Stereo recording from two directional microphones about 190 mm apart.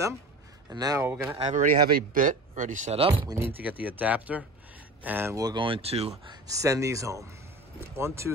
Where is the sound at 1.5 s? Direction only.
50° right (ahead or behind).